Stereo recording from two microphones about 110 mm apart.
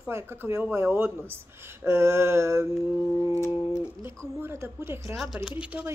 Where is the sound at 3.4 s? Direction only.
25° left (ahead or behind).